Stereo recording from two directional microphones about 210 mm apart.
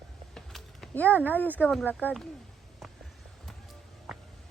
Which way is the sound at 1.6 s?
5° left (ahead or behind).